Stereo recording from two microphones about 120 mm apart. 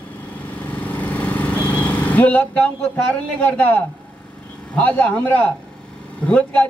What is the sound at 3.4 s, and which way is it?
A man's voice, 15° left (ahead or behind).